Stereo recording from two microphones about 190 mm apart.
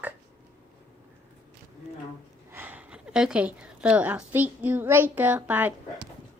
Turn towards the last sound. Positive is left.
turn(degrees=-10)  # may be behind; listen again after turning